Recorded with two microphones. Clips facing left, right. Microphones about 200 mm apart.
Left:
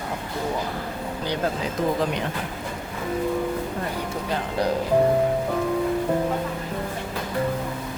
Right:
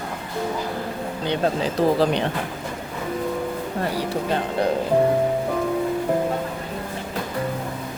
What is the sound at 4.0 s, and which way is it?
Speech, 25° right (ahead or behind).